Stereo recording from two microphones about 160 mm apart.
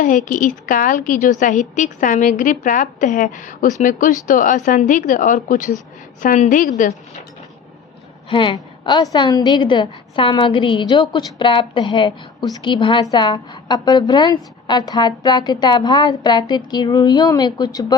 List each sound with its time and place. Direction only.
0.0 s a woman's voice: 55° left (ahead or behind)
8.3 s a woman's voice: 30° left (ahead or behind)